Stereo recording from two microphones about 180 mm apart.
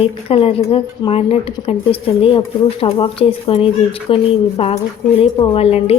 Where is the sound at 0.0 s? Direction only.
30° left (ahead or behind).